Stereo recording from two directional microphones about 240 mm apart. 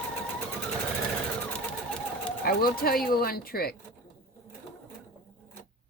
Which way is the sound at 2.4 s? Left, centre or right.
Left.